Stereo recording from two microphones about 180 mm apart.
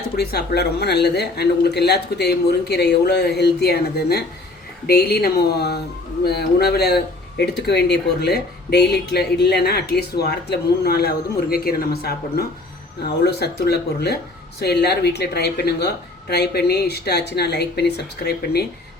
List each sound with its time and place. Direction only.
0.2 s speech: 65° left (ahead or behind)